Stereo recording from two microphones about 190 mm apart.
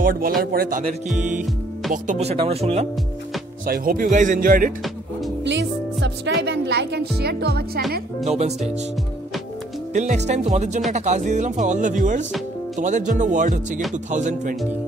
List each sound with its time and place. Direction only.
0.0 s a man's voice: 50° right (ahead or behind)
1.9 s speech: 40° right (ahead or behind)
3.6 s speech: 50° right (ahead or behind)
5.4 s speech: 70° right (ahead or behind)
8.2 s speech: 35° right (ahead or behind)
9.9 s speech: 40° right (ahead or behind)